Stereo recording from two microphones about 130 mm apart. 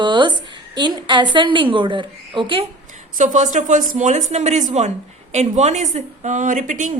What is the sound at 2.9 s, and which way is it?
A woman's voice, 75° right (ahead or behind).